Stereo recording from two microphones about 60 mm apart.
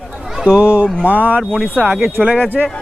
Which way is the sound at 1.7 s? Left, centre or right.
Right.